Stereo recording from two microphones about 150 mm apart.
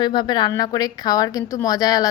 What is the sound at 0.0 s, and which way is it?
A woman's voice, 30° left (ahead or behind).